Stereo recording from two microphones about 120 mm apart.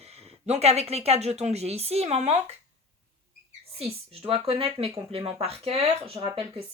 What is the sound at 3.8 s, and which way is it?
A woman's voice, 55° right (ahead or behind).